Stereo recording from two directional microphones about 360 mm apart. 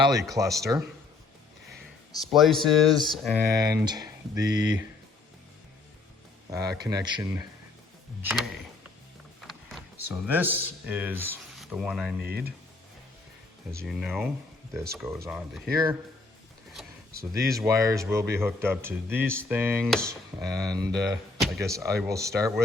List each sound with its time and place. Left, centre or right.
0.0 s a man's voice: centre
2.2 s speech: centre
3.6 s a man's voice: centre
6.5 s a man's voice: centre
9.5 s speech: centre
12.2 s speech: right
13.7 s speech: centre
17.4 s a man's voice: centre